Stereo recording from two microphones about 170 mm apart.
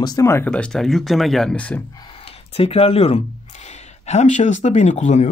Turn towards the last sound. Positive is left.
turn(degrees=45)  # may be behind; listen again after turning